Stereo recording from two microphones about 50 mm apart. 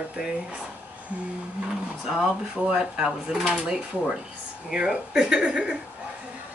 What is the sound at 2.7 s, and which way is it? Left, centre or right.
Speech, centre.